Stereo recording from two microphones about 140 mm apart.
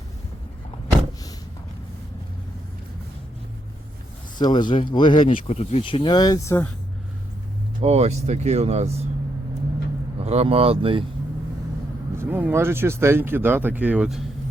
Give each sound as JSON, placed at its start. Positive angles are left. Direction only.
{"t": 4.4, "sound": "speech", "side_deg": 30}
{"t": 5.3, "sound": "speech", "side_deg": 45}
{"t": 7.8, "sound": "speech", "side_deg": -50}
{"t": 10.2, "sound": "speech", "side_deg": -45}
{"t": 12.1, "sound": "speech", "side_deg": -15}